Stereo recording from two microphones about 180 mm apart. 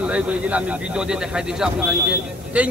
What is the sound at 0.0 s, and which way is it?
Speech, 5° right (ahead or behind).